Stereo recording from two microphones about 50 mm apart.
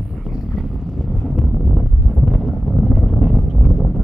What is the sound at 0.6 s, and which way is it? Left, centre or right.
Wind noise, centre.